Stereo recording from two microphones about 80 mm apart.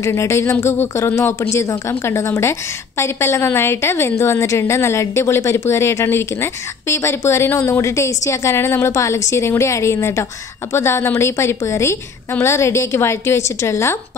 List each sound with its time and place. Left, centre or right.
0.0 s a woman's voice: left